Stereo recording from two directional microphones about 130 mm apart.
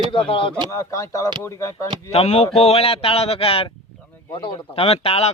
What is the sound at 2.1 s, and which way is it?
Speech, 50° left (ahead or behind).